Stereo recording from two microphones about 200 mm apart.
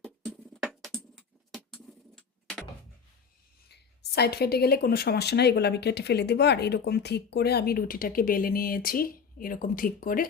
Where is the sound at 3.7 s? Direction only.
55° left (ahead or behind).